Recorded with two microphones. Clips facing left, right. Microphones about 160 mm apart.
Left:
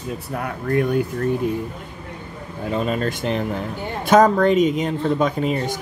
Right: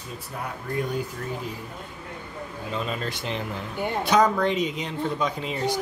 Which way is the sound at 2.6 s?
50° left (ahead or behind).